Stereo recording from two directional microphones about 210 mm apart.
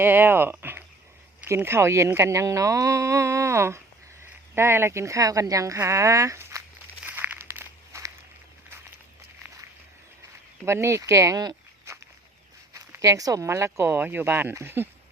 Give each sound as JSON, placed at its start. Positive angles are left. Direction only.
{"t": 0.0, "sound": "a woman's voice", "side_deg": -10}
{"t": 7.0, "sound": "a sound", "side_deg": -10}
{"t": 10.7, "sound": "a woman's voice", "side_deg": -15}